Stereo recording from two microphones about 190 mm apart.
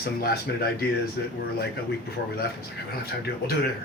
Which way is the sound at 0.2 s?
55° left (ahead or behind).